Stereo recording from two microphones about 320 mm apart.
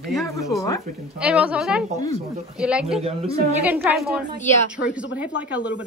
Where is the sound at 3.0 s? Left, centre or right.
Centre.